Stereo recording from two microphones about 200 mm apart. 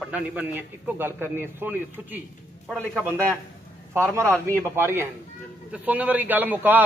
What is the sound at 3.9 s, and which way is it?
A man's voice, 15° right (ahead or behind).